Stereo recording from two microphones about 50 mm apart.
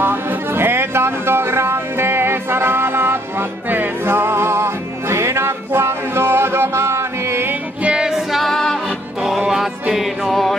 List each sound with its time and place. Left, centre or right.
0.0 s music: right
7.8 s music: centre
8.5 s music: centre
9.4 s music: centre